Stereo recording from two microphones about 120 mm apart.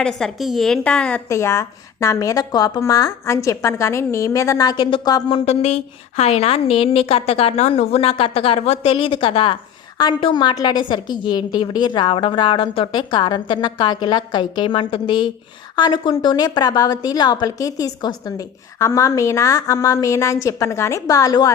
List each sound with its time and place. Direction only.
0.0 s a woman's voice: centre (ahead or behind)
1.3 s a woman's voice: 25° left (ahead or behind)
5.3 s a woman's voice: 65° left (ahead or behind); by 21.5 s 30° left (ahead or behind)